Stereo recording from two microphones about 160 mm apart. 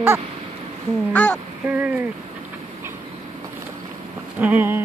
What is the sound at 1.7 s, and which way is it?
Speech, 10° right (ahead or behind).